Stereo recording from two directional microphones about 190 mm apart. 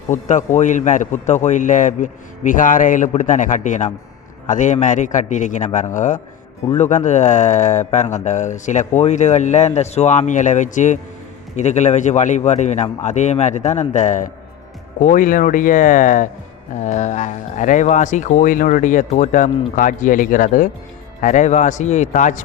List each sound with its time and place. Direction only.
0.1 s a man's voice: 40° left (ahead or behind)